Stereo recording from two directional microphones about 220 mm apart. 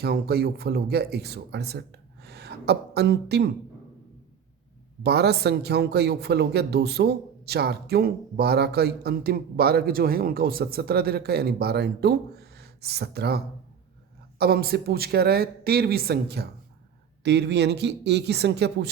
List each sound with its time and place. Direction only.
0.0 s a man's voice: 45° right (ahead or behind)
5.0 s a man's voice: 50° right (ahead or behind)